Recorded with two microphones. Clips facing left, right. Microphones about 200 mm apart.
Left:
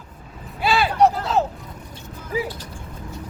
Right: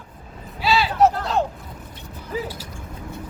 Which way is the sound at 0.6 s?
50° left (ahead or behind).